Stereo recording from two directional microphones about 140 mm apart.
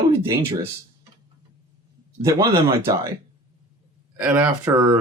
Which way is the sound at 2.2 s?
20° right (ahead or behind).